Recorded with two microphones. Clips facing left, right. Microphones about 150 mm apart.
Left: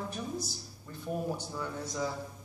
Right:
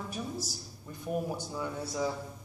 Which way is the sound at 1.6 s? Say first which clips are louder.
Right 2 dB; 10° right (ahead or behind).